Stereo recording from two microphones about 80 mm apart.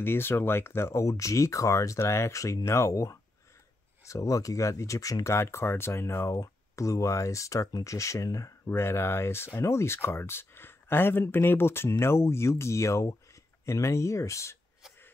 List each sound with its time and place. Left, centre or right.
0.0 s speech: left
6.3 s speech: left
8.6 s speech: left